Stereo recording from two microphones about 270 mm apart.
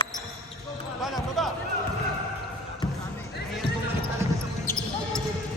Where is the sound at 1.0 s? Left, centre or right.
Centre.